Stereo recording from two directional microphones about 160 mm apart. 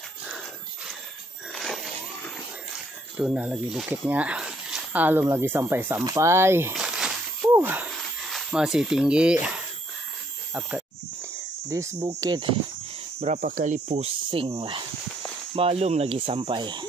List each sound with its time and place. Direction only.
1.5 s a sound: centre (ahead or behind)
3.2 s speech: 5° right (ahead or behind)
6.7 s a sound: 5° right (ahead or behind)
7.5 s speech: 10° right (ahead or behind)
7.9 s speech: centre (ahead or behind)
12.2 s speech: 30° right (ahead or behind)
13.2 s speech: 40° right (ahead or behind)
15.5 s speech: 40° right (ahead or behind)